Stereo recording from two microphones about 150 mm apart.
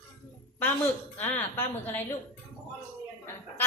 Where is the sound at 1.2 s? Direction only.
15° left (ahead or behind).